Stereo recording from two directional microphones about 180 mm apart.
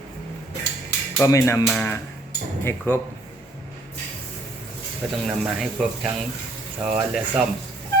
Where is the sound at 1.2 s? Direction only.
15° left (ahead or behind).